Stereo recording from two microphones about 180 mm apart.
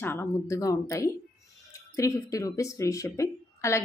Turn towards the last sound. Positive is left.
turn(degrees=15)  # may be behind; listen again after turning